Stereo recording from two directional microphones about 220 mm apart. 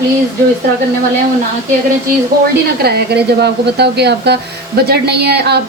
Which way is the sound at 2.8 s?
45° right (ahead or behind).